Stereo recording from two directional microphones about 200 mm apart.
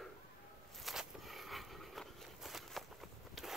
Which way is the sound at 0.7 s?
Centre (ahead or behind).